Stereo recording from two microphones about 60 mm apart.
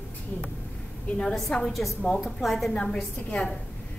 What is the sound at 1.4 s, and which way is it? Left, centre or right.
A woman's voice, centre.